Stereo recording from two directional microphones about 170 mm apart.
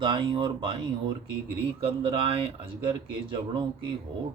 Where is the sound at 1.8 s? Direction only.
30° right (ahead or behind).